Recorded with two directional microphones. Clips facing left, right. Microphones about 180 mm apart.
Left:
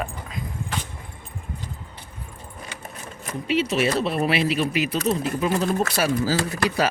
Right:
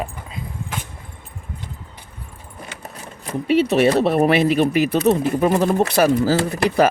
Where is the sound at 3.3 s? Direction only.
60° right (ahead or behind).